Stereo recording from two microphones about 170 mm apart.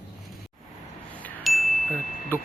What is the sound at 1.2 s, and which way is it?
Chime, centre (ahead or behind).